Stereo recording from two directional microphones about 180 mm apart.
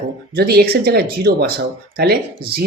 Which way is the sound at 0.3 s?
60° right (ahead or behind).